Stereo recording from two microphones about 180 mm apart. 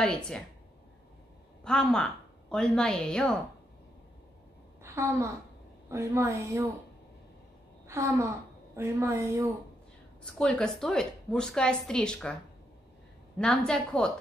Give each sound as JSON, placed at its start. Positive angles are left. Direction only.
{"t": 1.6, "sound": "a woman's voice", "side_deg": 5}
{"t": 4.8, "sound": "a woman's voice", "side_deg": -15}
{"t": 7.9, "sound": "a woman's voice", "side_deg": -15}
{"t": 10.2, "sound": "a woman's voice", "side_deg": 5}
{"t": 13.4, "sound": "a woman's voice", "side_deg": 5}